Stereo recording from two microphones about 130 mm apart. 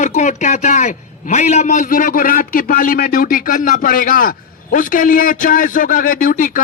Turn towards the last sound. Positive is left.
turn(degrees=90)